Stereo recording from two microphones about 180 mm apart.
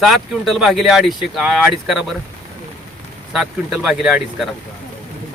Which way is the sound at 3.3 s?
5° right (ahead or behind).